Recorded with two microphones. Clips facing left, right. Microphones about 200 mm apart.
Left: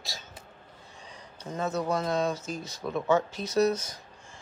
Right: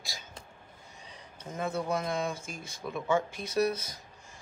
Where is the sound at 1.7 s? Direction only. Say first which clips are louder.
Left 4 dB; 25° right (ahead or behind).